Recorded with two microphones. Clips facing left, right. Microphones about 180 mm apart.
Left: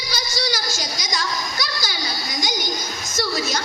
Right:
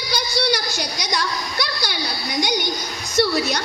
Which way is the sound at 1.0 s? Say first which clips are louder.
Right 3 dB; 60° right (ahead or behind).